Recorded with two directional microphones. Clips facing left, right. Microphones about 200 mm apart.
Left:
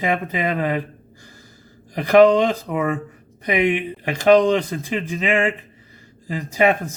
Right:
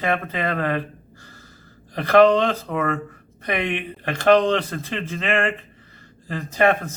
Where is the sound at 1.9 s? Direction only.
15° left (ahead or behind).